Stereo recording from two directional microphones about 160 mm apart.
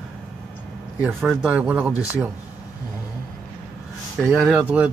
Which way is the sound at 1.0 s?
5° right (ahead or behind).